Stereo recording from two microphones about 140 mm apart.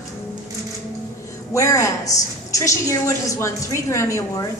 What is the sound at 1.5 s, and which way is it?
A woman's voice, 20° left (ahead or behind).